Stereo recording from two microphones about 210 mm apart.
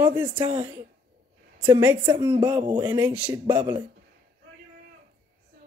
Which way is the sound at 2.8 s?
10° right (ahead or behind).